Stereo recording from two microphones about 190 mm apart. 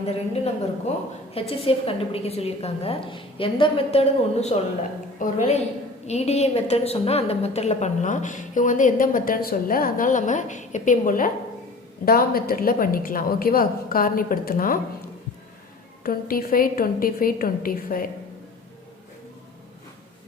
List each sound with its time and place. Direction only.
0.0 s a woman's voice: 35° left (ahead or behind)
16.0 s a woman's voice: 50° left (ahead or behind)